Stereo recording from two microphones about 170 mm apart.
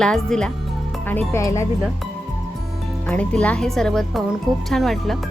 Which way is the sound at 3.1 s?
5° left (ahead or behind).